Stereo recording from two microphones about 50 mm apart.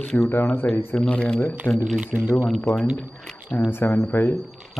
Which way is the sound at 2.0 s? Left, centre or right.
Right.